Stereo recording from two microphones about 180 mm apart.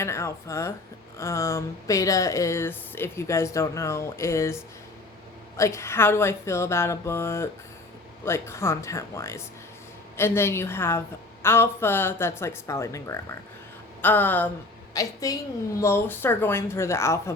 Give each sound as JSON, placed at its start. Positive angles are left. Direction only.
{"t": 0.0, "sound": "a woman's voice", "side_deg": 15}